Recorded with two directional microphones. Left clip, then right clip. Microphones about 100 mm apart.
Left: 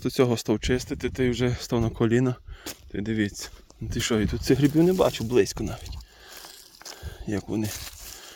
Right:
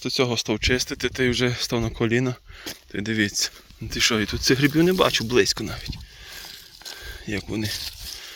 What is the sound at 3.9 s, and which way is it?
Speech, 50° left (ahead or behind).